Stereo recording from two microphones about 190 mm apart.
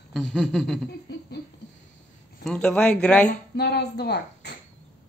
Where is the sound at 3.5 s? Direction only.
60° left (ahead or behind).